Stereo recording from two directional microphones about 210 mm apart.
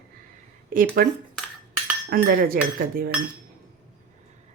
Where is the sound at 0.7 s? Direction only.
40° right (ahead or behind).